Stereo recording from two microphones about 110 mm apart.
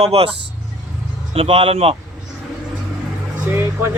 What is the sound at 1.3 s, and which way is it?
Speech, 65° right (ahead or behind).